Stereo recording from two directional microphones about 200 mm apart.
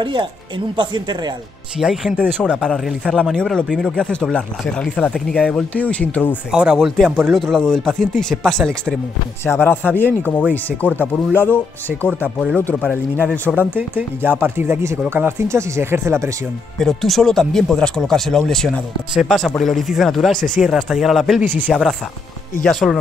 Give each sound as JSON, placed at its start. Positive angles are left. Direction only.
{"t": 0.0, "sound": "speech", "side_deg": -25}
{"t": 1.8, "sound": "speech", "side_deg": -5}
{"t": 13.7, "sound": "speech", "side_deg": -10}
{"t": 16.7, "sound": "speech", "side_deg": 0}